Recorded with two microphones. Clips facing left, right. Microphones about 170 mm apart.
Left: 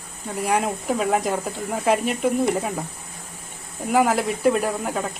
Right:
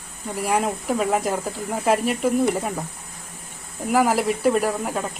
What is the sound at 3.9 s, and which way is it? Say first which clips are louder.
Speech: even; centre (ahead or behind).